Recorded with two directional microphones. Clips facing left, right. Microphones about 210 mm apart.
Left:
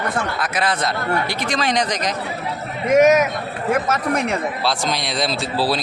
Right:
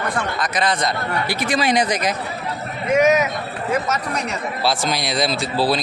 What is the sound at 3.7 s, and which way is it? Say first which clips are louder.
Speech: left 3 dB; 55° left (ahead or behind).